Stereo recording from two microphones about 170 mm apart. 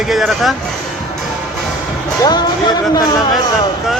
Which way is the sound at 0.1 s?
Centre (ahead or behind).